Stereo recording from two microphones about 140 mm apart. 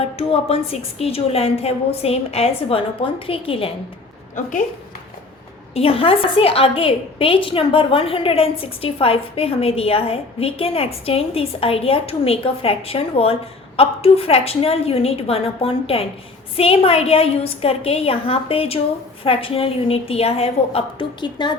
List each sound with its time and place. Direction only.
0.0 s a woman's voice: 45° left (ahead or behind)
4.4 s a woman's voice: 65° left (ahead or behind)
5.7 s a woman's voice: 40° left (ahead or behind)